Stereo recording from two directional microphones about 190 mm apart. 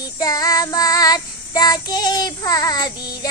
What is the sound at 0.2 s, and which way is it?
Child singing, 20° left (ahead or behind).